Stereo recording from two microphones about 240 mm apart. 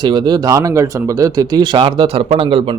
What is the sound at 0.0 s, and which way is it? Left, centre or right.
A man's voice, centre.